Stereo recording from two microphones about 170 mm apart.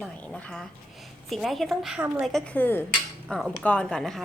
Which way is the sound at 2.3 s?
10° left (ahead or behind).